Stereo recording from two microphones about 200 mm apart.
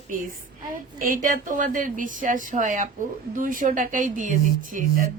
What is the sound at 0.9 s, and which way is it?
Speech, 45° right (ahead or behind).